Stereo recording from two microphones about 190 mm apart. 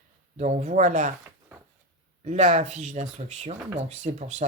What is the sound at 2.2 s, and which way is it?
Speech, 40° right (ahead or behind).